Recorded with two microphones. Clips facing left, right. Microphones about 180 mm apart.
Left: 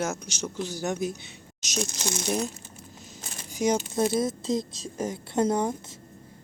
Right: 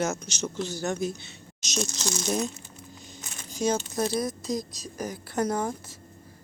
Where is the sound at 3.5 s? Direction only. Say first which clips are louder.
Left 2 dB; 15° left (ahead or behind).